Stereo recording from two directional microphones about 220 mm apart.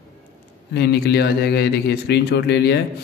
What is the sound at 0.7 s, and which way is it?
A man's voice, 50° left (ahead or behind).